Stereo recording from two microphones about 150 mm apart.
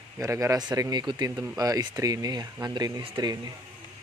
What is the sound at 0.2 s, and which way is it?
Speech, 20° right (ahead or behind).